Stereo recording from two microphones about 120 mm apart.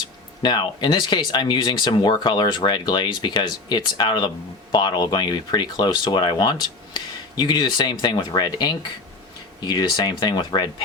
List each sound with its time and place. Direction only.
0.4 s speech: 40° left (ahead or behind)